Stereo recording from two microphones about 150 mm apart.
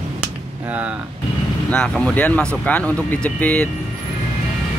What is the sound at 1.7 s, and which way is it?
Speech, 5° left (ahead or behind).